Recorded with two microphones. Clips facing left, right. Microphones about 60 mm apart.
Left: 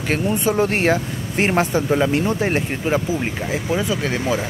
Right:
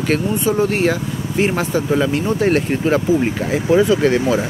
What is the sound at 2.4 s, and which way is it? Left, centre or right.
Speech, centre.